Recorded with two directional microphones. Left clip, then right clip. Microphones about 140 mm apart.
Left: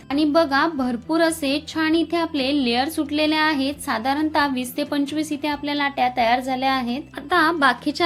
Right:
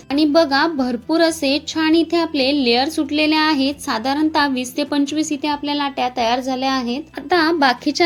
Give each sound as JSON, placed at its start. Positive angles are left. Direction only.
{"t": 0.1, "sound": "a woman's voice", "side_deg": -20}